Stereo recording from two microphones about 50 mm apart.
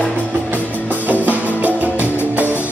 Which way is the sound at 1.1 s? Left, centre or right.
Right.